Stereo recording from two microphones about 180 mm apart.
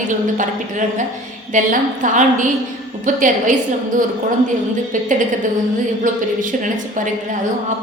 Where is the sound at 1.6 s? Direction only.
45° right (ahead or behind).